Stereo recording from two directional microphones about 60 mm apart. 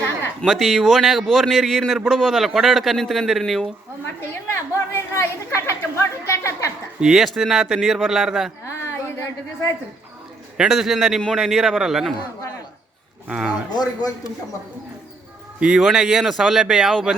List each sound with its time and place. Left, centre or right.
0.4 s a man's voice: centre
4.0 s a woman's voice: left
6.2 s a sound: left
7.0 s a man's voice: centre
8.6 s a sound: left
10.6 s a man's voice: centre
13.2 s speech: centre
14.0 s speech: left
15.6 s a man's voice: centre